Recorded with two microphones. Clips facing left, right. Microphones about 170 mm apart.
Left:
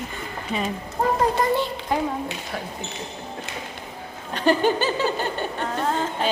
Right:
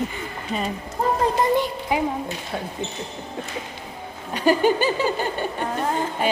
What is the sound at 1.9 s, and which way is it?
Speech, 10° right (ahead or behind).